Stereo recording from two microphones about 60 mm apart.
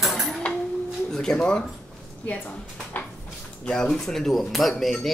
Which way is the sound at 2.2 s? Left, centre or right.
Left.